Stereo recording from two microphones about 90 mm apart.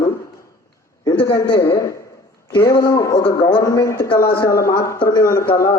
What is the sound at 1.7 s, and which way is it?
A man's voice, 35° left (ahead or behind).